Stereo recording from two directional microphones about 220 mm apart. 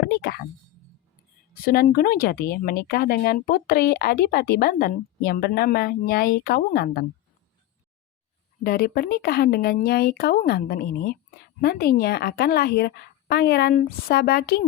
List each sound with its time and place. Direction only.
0.1 s speech: 45° left (ahead or behind)
1.6 s speech: 40° left (ahead or behind)
8.6 s speech: 40° left (ahead or behind)